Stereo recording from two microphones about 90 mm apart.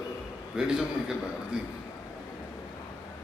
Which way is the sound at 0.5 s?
10° right (ahead or behind).